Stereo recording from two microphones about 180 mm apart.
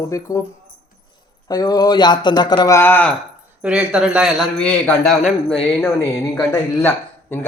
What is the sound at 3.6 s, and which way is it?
A man's voice, 5° right (ahead or behind).